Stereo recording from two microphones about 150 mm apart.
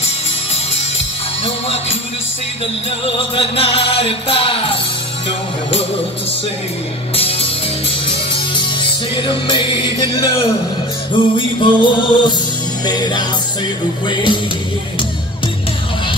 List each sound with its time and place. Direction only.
3.2 s music: 35° left (ahead or behind)
7.2 s music: 40° left (ahead or behind)
9.1 s music: 35° left (ahead or behind)